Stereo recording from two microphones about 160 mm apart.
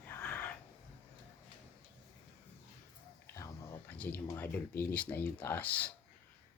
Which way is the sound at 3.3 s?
15° left (ahead or behind).